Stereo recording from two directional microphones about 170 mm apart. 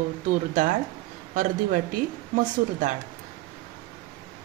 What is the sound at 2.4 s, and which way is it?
Speech, 50° right (ahead or behind).